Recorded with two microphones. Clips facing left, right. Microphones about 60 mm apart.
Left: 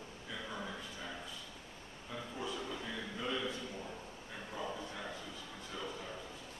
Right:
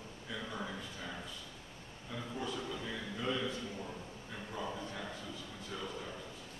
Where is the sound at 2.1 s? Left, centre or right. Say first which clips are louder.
Right 2 dB; centre.